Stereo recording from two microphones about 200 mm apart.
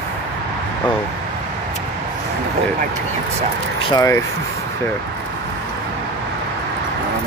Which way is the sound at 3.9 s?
15° left (ahead or behind).